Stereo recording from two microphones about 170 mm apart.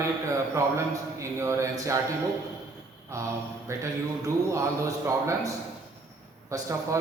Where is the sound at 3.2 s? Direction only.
20° right (ahead or behind).